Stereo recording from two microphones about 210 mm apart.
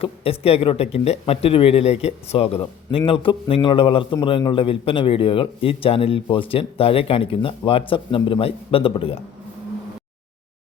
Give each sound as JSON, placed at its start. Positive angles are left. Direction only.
{"t": 0.0, "sound": "a man's voice", "side_deg": 25}